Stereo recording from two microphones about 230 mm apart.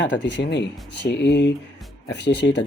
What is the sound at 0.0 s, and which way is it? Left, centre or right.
Speech, left.